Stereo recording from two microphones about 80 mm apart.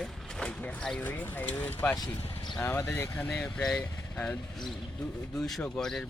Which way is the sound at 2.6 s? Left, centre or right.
Left.